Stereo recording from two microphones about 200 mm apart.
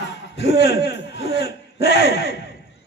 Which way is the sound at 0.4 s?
55° left (ahead or behind).